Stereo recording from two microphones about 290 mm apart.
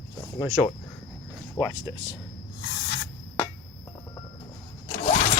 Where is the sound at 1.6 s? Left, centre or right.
Centre.